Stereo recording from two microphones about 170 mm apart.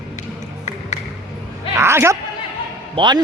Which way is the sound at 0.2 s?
45° left (ahead or behind).